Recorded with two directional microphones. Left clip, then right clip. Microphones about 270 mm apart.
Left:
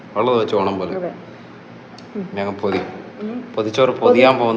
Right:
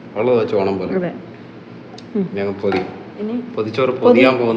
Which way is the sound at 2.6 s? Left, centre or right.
Centre.